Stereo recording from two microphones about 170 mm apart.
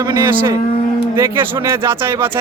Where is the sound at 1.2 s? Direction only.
15° right (ahead or behind).